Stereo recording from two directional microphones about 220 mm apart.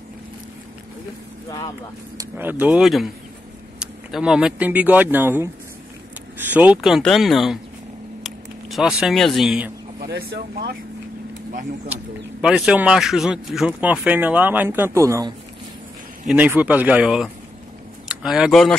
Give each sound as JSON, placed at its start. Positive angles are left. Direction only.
{"t": 2.1, "sound": "speech", "side_deg": -10}
{"t": 6.5, "sound": "speech", "side_deg": -5}
{"t": 8.2, "sound": "a sound", "side_deg": 0}
{"t": 9.9, "sound": "speech", "side_deg": -45}
{"t": 11.9, "sound": "speech", "side_deg": -5}